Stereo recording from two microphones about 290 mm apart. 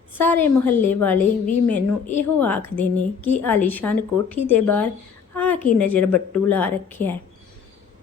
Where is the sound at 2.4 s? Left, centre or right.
Centre.